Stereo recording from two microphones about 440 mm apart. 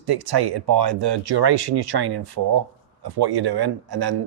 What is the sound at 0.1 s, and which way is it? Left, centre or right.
Speech, right.